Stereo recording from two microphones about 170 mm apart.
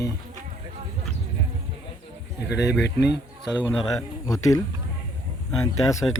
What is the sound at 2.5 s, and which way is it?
Speech, 80° left.